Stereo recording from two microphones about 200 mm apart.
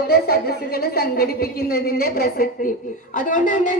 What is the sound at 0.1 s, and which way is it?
A woman's voice, 50° left (ahead or behind).